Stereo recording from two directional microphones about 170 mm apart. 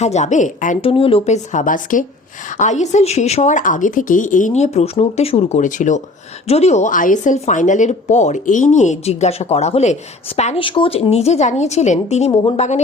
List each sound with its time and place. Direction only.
0.0 s a woman's voice: 40° left (ahead or behind)
0.8 s a woman's voice: 35° left (ahead or behind)